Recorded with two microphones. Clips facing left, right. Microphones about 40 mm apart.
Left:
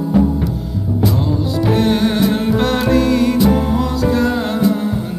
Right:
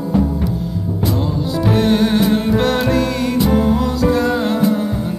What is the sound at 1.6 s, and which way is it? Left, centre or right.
Music, centre.